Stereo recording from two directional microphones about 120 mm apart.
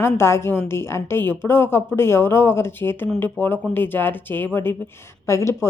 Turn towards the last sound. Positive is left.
turn(degrees=25)  # may be behind; listen again after turning